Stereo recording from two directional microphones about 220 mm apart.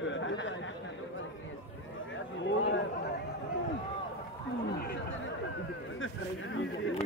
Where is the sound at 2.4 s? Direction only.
60° left (ahead or behind).